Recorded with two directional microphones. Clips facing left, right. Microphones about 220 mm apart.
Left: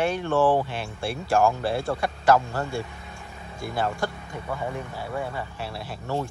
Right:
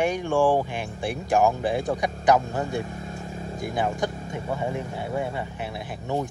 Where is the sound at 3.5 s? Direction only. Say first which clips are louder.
Right 1 dB; 15° right (ahead or behind).